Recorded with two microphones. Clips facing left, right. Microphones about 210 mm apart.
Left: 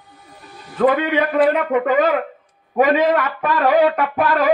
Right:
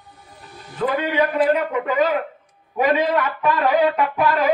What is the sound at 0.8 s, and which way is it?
A man's voice, 55° left (ahead or behind).